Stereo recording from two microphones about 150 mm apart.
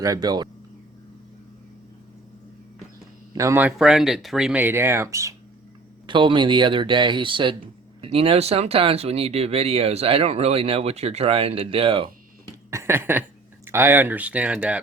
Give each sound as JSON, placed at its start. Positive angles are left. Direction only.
{"t": 0.0, "sound": "speech", "side_deg": -25}
{"t": 3.3, "sound": "speech", "side_deg": -20}
{"t": 6.1, "sound": "speech", "side_deg": -30}
{"t": 12.7, "sound": "a sound", "side_deg": -15}
{"t": 13.7, "sound": "speech", "side_deg": -15}